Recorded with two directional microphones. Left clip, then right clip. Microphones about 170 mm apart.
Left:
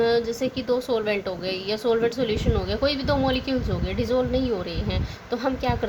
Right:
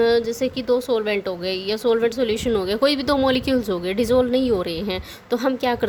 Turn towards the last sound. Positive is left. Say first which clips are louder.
# right 4 dB
turn(degrees=-55)  # may be behind; listen again after turning